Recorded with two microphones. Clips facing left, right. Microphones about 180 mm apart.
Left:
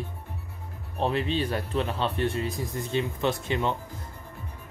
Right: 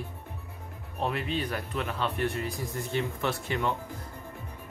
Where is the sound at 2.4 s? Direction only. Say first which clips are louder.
Left 3 dB; 20° left (ahead or behind).